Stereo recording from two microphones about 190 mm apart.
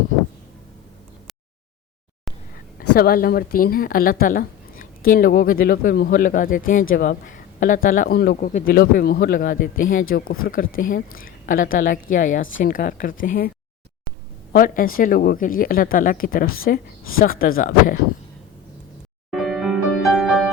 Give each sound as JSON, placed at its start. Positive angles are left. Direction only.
{"t": 2.7, "sound": "a woman's voice", "side_deg": 50}
{"t": 14.5, "sound": "a woman's voice", "side_deg": 45}
{"t": 19.3, "sound": "music", "side_deg": 0}